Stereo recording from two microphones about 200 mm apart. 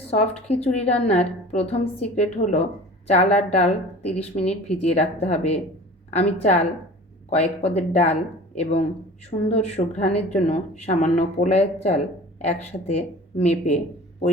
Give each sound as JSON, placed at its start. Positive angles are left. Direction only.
{"t": 0.1, "sound": "a woman's voice", "side_deg": 30}